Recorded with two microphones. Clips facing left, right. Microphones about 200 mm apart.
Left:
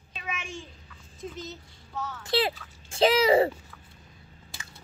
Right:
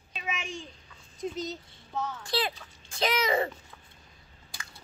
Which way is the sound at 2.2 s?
25° left (ahead or behind).